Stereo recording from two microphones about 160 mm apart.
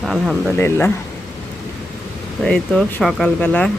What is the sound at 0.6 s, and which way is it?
Speech, 15° left (ahead or behind).